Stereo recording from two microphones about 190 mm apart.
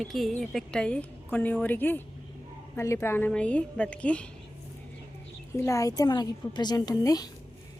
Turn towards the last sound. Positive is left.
turn(degrees=20)  # may be behind; listen again after turning